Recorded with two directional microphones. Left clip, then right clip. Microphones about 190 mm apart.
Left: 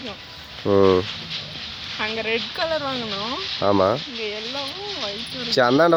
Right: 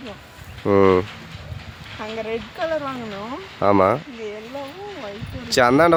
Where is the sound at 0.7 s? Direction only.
25° right (ahead or behind).